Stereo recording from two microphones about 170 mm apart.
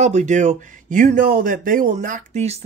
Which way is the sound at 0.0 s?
45° right (ahead or behind).